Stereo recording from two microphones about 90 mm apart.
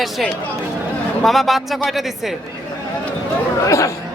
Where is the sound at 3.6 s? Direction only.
35° left (ahead or behind).